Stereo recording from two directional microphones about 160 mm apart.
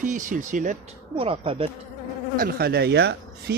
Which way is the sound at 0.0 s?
55° right (ahead or behind).